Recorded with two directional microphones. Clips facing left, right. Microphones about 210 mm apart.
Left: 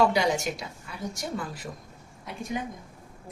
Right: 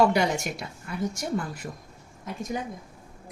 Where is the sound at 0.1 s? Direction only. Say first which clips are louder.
Even; 55° right (ahead or behind).